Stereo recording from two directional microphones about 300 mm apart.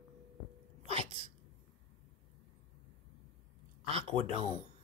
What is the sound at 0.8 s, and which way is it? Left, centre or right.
Sneeze, centre.